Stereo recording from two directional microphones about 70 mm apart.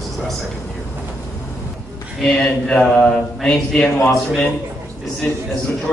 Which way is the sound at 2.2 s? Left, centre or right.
Centre.